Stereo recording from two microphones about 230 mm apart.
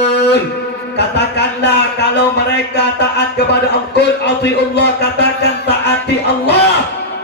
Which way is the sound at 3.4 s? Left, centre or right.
Left.